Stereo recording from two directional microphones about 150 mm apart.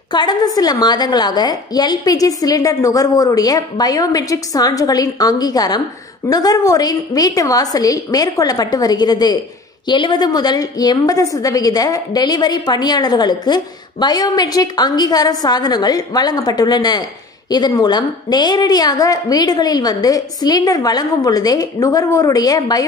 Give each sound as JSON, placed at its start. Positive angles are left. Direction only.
{"t": 0.1, "sound": "a woman's voice", "side_deg": 30}